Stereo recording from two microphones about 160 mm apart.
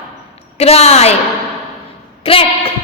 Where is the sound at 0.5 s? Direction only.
40° left (ahead or behind).